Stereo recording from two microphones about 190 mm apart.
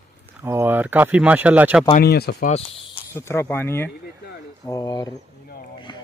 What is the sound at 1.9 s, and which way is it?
Speech, 55° left (ahead or behind).